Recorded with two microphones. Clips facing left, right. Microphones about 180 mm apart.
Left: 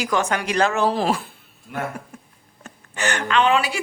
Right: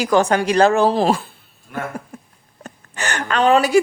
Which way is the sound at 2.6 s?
40° right (ahead or behind).